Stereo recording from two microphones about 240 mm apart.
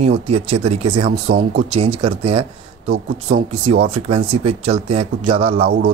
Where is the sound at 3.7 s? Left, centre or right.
Right.